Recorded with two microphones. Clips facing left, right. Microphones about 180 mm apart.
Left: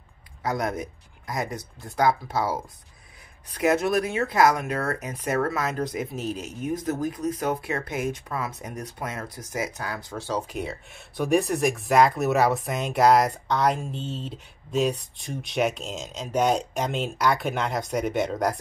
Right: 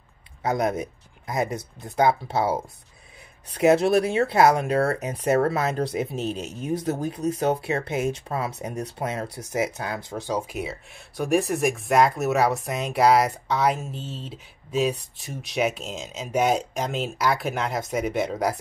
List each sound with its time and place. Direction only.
0.4 s speech: 25° right (ahead or behind); by 18.6 s 5° right (ahead or behind)